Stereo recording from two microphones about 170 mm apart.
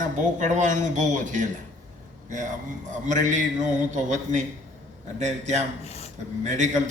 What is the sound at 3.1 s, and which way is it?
A man's voice, 45° right (ahead or behind).